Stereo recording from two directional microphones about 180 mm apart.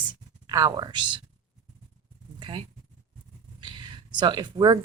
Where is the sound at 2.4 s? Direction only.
25° right (ahead or behind).